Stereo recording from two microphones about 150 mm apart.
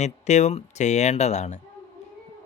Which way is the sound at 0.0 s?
50° left (ahead or behind).